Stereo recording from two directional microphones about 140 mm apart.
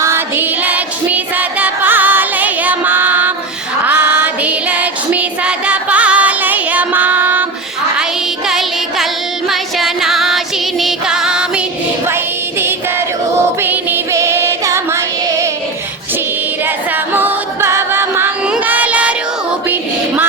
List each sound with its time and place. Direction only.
0.0 s music: 15° right (ahead or behind)
3.8 s female singing: 10° right (ahead or behind)
8.4 s music: centre (ahead or behind)
12.0 s music: 15° right (ahead or behind)
16.6 s music: 15° right (ahead or behind)
18.5 s child singing: 10° right (ahead or behind)